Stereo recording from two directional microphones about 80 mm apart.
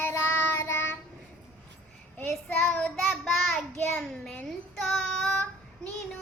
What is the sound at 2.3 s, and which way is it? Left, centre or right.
Child singing, left.